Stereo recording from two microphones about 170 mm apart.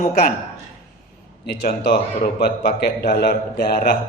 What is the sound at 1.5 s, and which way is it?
Speech, 70° left (ahead or behind).